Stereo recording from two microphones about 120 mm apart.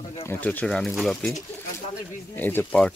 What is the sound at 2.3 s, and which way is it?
Speech, 15° left (ahead or behind).